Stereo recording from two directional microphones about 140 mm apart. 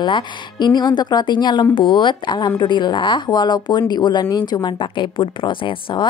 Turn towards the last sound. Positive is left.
turn(degrees=40)  # may be behind; listen again after turning